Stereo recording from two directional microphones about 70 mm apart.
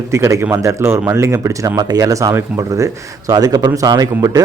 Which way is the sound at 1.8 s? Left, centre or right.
Right.